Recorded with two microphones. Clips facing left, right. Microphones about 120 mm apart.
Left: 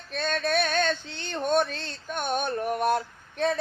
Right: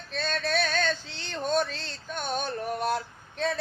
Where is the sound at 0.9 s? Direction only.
55° left (ahead or behind).